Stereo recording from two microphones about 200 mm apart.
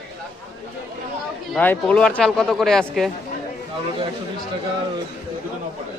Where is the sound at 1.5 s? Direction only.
5° left (ahead or behind).